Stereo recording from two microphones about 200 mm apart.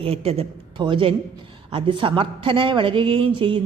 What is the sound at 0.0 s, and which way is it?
A man's voice, 30° right (ahead or behind).